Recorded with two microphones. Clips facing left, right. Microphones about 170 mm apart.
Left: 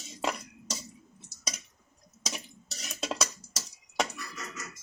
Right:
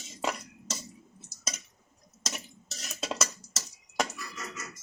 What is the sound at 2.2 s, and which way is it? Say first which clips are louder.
Dishes: even; 5° right (ahead or behind).